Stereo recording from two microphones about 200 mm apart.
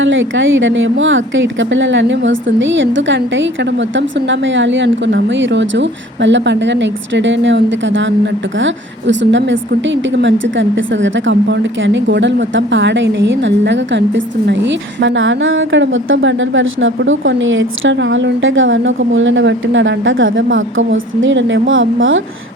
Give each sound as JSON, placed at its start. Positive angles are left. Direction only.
{"t": 0.0, "sound": "speech", "side_deg": -70}